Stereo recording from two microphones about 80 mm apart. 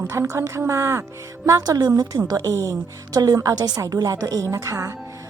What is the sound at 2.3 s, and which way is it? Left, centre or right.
A woman's voice, right.